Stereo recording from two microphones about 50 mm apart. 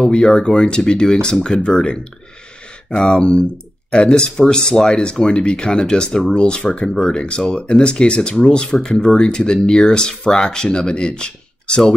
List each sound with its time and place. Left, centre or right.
0.0 s speech: centre
3.1 s speech: centre